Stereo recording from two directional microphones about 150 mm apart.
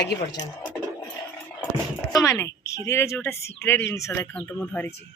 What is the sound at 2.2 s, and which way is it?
Speech, 20° left (ahead or behind).